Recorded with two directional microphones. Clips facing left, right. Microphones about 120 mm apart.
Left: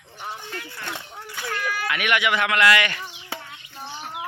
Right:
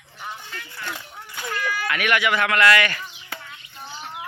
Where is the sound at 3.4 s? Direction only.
30° left (ahead or behind).